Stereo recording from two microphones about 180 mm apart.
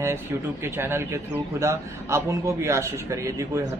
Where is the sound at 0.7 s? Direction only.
15° right (ahead or behind).